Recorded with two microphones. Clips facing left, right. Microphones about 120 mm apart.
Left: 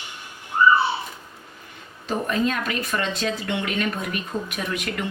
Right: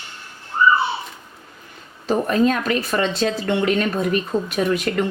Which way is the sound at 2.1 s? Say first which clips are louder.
Right 6 dB; 40° right (ahead or behind).